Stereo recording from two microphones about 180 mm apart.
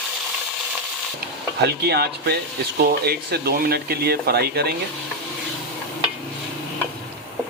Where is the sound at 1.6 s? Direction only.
65° right (ahead or behind).